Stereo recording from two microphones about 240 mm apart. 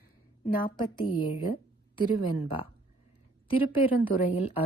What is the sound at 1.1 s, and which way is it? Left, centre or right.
Speech, left.